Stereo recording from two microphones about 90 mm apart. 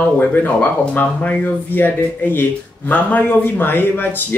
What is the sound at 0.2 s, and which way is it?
A man's voice, 20° left (ahead or behind).